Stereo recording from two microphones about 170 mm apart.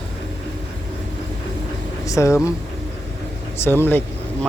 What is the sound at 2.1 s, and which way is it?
Speech, 15° left (ahead or behind).